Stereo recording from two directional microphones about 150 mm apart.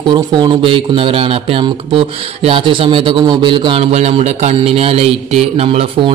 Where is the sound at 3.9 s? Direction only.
45° right (ahead or behind).